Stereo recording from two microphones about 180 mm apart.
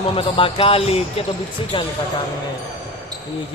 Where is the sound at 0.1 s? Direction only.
30° left (ahead or behind).